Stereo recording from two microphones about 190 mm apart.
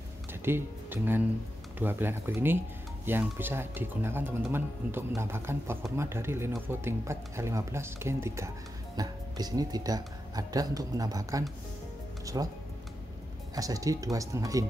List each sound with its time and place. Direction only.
0.3 s speech: 10° right (ahead or behind)
13.6 s speech: 20° right (ahead or behind)